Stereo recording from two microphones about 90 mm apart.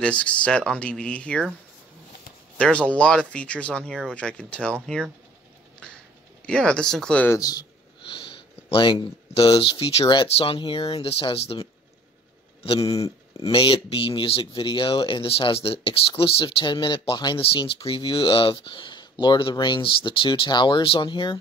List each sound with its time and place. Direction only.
0.0 s speech: 15° left (ahead or behind)
2.5 s speech: 15° left (ahead or behind)
6.4 s speech: 10° left (ahead or behind)
7.3 s speech: 40° left (ahead or behind)
8.1 s speech: 75° left (ahead or behind); by 10.0 s 90° left
10.0 s speech: 75° left (ahead or behind)
12.6 s speech: 90° left
13.4 s speech: 80° left; by 17.4 s 55° left (ahead or behind)
17.4 s speech: 85° left; by 21.4 s 60° left (ahead or behind)